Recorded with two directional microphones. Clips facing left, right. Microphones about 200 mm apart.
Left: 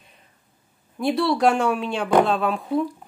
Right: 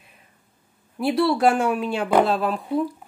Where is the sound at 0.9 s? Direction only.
5° right (ahead or behind).